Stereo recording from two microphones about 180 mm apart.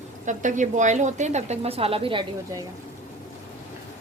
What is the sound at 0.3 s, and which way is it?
A woman's voice, 45° right (ahead or behind).